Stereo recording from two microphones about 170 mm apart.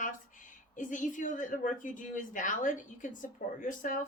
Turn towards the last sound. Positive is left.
turn(degrees=50)  # may be behind; listen again after turning